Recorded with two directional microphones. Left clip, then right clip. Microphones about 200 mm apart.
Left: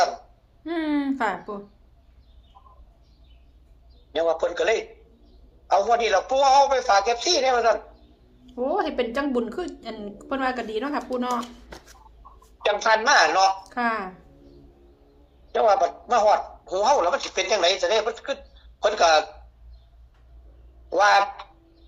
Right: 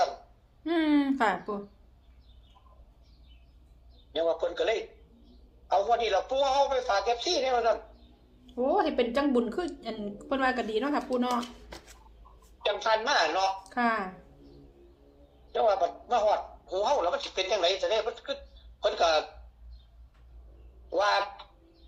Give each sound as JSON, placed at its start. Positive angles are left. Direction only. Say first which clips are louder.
{"t": 0.6, "sound": "a woman's voice", "louder": "even", "side_deg": -5}
{"t": 4.1, "sound": "a man's voice", "louder": "left 5 dB", "side_deg": 50}
{"t": 8.4, "sound": "a woman's voice", "louder": "left 2 dB", "side_deg": 5}
{"t": 12.6, "sound": "a man's voice", "louder": "left 7 dB", "side_deg": 50}
{"t": 13.7, "sound": "speech", "louder": "left 3 dB", "side_deg": 10}
{"t": 15.5, "sound": "a man's voice", "louder": "left 6 dB", "side_deg": 50}
{"t": 20.9, "sound": "speech", "louder": "left 8 dB", "side_deg": 55}